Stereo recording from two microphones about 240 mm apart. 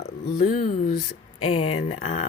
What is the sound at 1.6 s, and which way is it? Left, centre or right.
Speech, left.